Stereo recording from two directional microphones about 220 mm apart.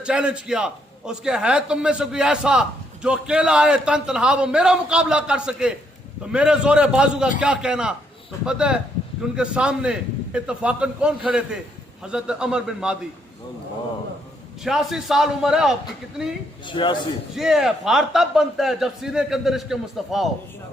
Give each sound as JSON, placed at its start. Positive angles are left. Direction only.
{"t": 0.0, "sound": "a man's voice", "side_deg": -5}
{"t": 14.6, "sound": "a man's voice", "side_deg": 0}
{"t": 16.6, "sound": "a man's voice", "side_deg": 20}
{"t": 17.3, "sound": "a man's voice", "side_deg": 0}